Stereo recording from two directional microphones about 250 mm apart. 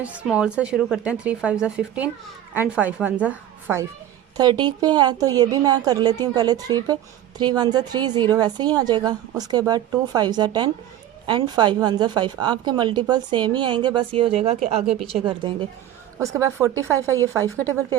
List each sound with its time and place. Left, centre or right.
0.0 s a woman's voice: centre
4.4 s a woman's voice: centre